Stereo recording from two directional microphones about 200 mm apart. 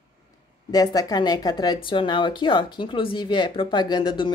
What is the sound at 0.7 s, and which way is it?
Speech, 20° left (ahead or behind).